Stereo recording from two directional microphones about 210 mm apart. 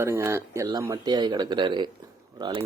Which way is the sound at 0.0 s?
10° right (ahead or behind).